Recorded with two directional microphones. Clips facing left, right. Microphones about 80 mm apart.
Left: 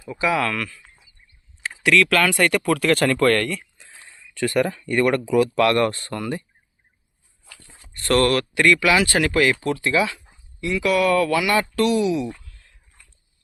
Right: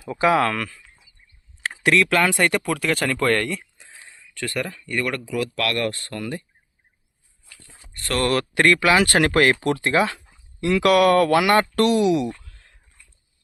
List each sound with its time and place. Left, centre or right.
0.1 s speech: right
1.7 s a sound: right
2.0 s speech: centre
2.6 s speech: centre
3.9 s a sound: centre
4.4 s speech: centre
8.5 s speech: right
9.0 s speech: right
10.6 s speech: right
12.5 s a sound: right
13.0 s dog: left